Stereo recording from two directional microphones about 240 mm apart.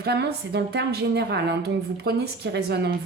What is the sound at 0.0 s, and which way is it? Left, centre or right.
A woman's voice, right.